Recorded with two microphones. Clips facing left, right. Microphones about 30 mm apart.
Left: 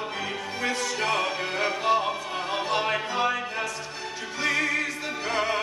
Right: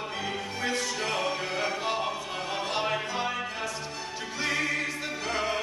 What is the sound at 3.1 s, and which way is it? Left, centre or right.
Music, centre.